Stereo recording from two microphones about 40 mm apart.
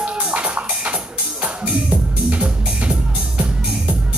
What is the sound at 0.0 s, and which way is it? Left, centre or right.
Music, right.